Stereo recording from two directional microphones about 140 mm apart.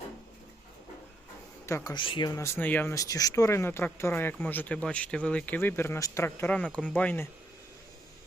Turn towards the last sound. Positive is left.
turn(degrees=10)  # may be behind; listen again after turning